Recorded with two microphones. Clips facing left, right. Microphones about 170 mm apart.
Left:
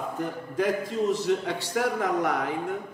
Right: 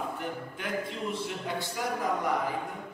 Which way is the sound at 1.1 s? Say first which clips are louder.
Left 8 dB; 75° left (ahead or behind).